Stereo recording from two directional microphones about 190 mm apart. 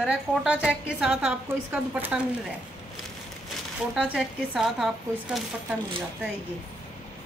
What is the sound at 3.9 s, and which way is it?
A woman's voice, 5° right (ahead or behind).